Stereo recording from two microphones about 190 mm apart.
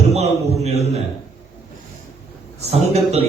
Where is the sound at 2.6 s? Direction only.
35° right (ahead or behind).